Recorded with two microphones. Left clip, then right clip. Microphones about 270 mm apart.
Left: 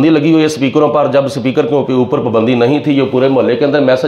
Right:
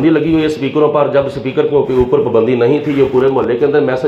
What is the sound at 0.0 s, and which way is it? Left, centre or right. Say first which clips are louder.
Speech: left 2 dB; left.